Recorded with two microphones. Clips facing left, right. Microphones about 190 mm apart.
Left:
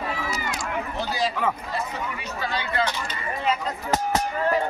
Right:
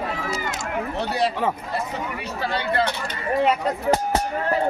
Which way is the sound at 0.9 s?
65° right (ahead or behind).